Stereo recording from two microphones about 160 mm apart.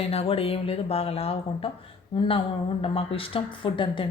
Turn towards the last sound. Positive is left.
turn(degrees=30)  # may be behind; listen again after turning